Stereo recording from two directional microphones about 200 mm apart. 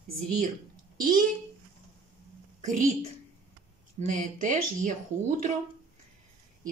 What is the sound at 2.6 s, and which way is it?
Speech, 40° right (ahead or behind).